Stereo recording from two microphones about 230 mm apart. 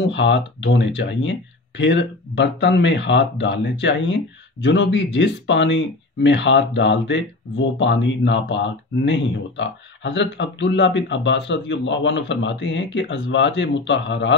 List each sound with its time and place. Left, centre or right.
0.0 s speech: left